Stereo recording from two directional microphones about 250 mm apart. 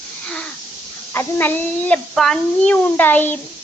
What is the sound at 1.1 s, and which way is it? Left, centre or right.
A child's voice, centre.